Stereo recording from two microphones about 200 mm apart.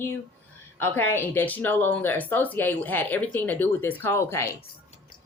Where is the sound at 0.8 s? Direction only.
10° left (ahead or behind).